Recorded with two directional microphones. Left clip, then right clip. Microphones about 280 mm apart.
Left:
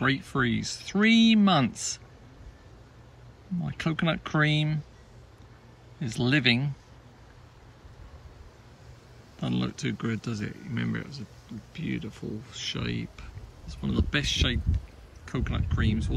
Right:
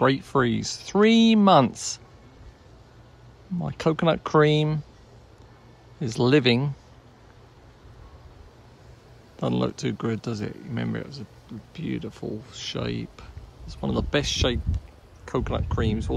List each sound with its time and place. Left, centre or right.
0.0 s speech: centre
3.6 s speech: centre
5.9 s speech: centre
9.4 s speech: centre